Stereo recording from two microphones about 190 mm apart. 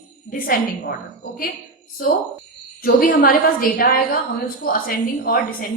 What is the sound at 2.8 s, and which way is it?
A woman's voice, 50° left (ahead or behind).